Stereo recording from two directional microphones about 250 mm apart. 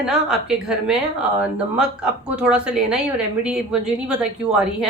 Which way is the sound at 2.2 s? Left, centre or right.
Centre.